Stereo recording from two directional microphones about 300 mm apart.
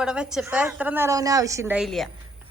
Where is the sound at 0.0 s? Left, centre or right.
Centre.